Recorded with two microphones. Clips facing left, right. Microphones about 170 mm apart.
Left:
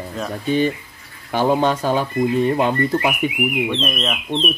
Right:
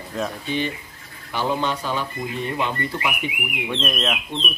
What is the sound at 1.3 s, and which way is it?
Speech, 45° left (ahead or behind).